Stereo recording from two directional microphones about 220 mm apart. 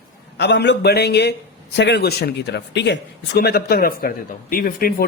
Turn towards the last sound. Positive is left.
turn(degrees=40)  # may be behind; listen again after turning